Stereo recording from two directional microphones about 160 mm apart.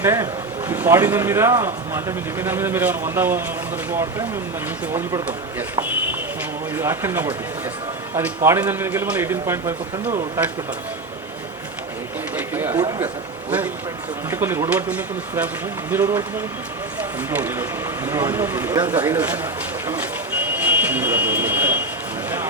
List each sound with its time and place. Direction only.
0.0 s a man's voice: 15° right (ahead or behind)
4.9 s a man's voice: 15° right (ahead or behind)
8.4 s a man's voice: 15° right (ahead or behind)
12.4 s a sound: 15° right (ahead or behind)
14.3 s a man's voice: 15° right (ahead or behind)
20.6 s a sound: 10° right (ahead or behind)